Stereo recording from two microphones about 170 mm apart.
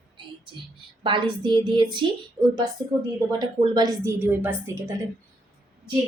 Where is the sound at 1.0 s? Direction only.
30° right (ahead or behind).